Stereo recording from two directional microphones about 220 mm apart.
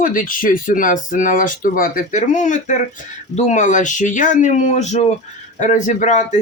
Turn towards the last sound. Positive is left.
turn(degrees=35)  # may be behind; listen again after turning